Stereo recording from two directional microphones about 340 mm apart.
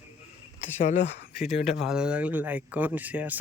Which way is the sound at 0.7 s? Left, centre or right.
Left.